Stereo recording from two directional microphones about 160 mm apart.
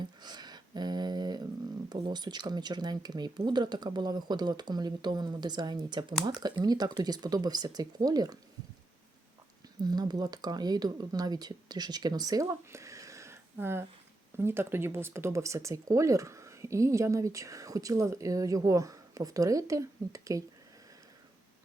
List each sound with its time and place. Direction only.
0.0 s a sound: 25° right (ahead or behind)
1.9 s speech: 25° right (ahead or behind)
9.8 s speech: 25° right (ahead or behind)